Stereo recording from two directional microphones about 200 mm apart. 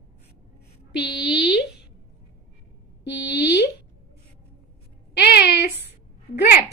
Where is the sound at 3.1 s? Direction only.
55° left (ahead or behind).